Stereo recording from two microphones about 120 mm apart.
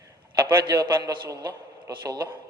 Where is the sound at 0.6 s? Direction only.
35° right (ahead or behind).